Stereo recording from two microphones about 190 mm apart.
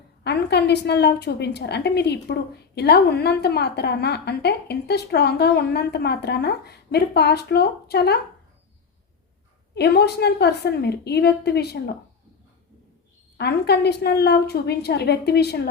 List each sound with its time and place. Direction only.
0.3 s a woman's voice: 60° left (ahead or behind)
9.7 s a woman's voice: 60° left (ahead or behind)
13.3 s a woman's voice: 60° left (ahead or behind)